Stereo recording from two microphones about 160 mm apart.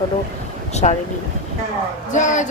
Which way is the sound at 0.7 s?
45° left (ahead or behind).